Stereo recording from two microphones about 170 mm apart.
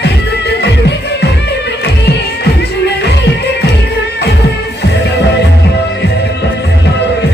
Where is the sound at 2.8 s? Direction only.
80° left.